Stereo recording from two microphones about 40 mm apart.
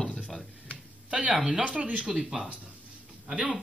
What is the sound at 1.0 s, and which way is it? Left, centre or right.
Speech, right.